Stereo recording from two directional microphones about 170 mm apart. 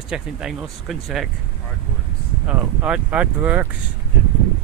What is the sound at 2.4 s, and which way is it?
Speech, 5° right (ahead or behind).